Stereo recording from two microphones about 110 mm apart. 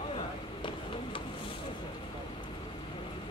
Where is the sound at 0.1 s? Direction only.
50° left (ahead or behind).